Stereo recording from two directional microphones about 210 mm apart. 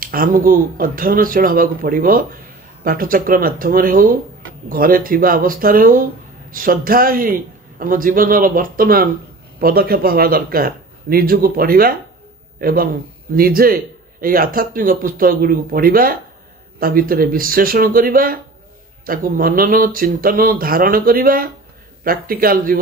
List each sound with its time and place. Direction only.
0.0 s a man's voice: 45° right (ahead or behind)